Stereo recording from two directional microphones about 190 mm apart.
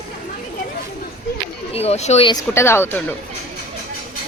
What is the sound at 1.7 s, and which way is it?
Speech, 35° left (ahead or behind).